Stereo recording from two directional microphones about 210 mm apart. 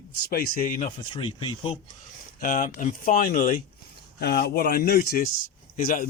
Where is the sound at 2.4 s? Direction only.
40° left (ahead or behind).